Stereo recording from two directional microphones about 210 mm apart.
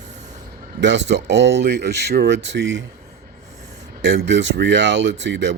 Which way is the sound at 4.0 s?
55° right (ahead or behind).